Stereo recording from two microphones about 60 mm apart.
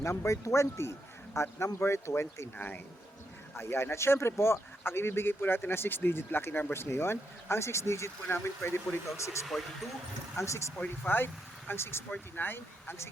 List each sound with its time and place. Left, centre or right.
0.0 s speech: left
3.5 s speech: left
8.3 s speech: left
9.1 s speech: left
9.5 s speech: centre
10.3 s speech: left
10.8 s speech: left